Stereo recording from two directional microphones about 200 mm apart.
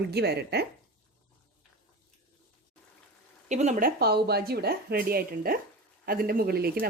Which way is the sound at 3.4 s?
35° right (ahead or behind).